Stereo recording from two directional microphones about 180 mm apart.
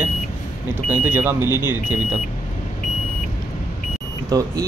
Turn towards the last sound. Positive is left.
turn(degrees=-20)  # may be behind; listen again after turning